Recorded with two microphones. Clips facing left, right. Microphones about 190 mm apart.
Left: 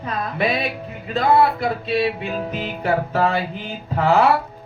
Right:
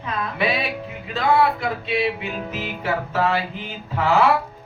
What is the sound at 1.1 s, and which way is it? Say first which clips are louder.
Music: left 2 dB; 35° left (ahead or behind).